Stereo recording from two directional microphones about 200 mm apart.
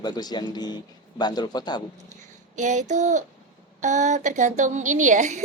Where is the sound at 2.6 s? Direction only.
35° right (ahead or behind).